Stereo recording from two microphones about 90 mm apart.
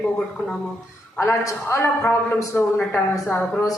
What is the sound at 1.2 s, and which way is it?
A man's voice, 35° left (ahead or behind).